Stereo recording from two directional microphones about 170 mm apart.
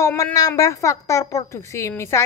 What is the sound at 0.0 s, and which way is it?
A woman's voice, 20° left (ahead or behind).